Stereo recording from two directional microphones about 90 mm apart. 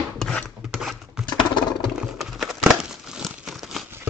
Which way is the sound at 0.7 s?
5° right (ahead or behind).